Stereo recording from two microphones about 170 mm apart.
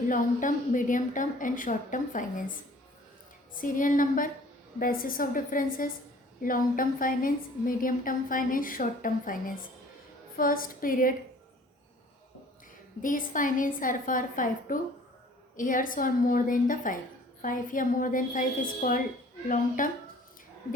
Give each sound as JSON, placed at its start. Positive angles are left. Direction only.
{"t": 0.1, "sound": "a woman's voice", "side_deg": 50}
{"t": 3.6, "sound": "a woman's voice", "side_deg": 50}
{"t": 13.0, "sound": "a woman's voice", "side_deg": 50}